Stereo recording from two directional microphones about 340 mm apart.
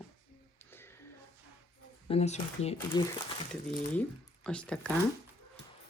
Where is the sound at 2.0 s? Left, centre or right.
Centre.